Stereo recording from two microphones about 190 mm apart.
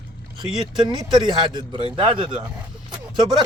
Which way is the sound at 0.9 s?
25° right (ahead or behind).